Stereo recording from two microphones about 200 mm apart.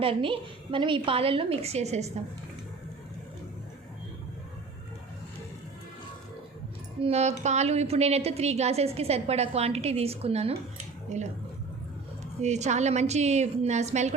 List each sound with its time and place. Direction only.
0.0 s a woman's voice: 25° right (ahead or behind)
7.0 s a woman's voice: 35° right (ahead or behind)
12.4 s a woman's voice: 35° right (ahead or behind)